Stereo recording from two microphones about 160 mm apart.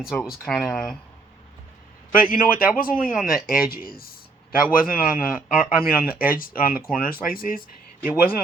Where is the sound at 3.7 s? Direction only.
65° left (ahead or behind).